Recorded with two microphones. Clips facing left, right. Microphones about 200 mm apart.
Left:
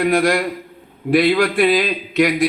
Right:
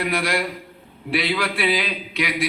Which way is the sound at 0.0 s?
45° left (ahead or behind).